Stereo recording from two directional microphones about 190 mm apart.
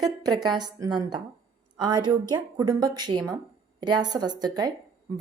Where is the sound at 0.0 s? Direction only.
20° right (ahead or behind).